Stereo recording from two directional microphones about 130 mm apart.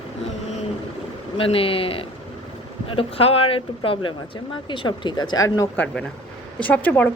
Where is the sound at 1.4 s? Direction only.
45° left (ahead or behind); by 5.6 s 30° left (ahead or behind).